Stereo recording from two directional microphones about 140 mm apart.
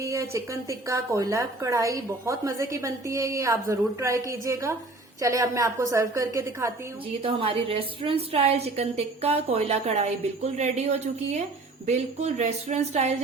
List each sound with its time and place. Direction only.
0.0 s a woman's voice: 20° right (ahead or behind)
7.2 s a woman's voice: 40° right (ahead or behind)